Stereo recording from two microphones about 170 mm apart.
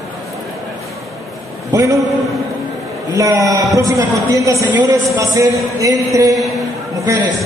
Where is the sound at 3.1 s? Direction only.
20° right (ahead or behind).